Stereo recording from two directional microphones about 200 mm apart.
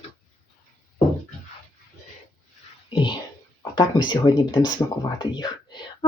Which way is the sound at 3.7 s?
20° left (ahead or behind).